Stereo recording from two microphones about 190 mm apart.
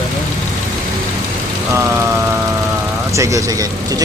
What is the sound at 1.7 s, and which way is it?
Speech, 15° right (ahead or behind).